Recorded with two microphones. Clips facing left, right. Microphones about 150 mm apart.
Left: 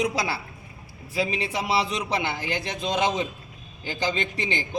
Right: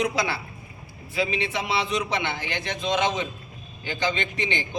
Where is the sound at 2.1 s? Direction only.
10° left (ahead or behind).